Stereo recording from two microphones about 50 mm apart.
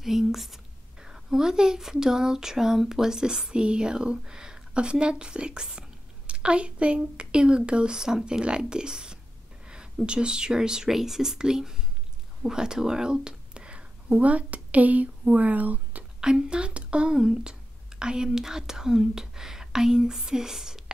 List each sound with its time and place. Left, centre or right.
0.0 s a woman's voice: centre; by 16.1 s right
16.2 s speech: centre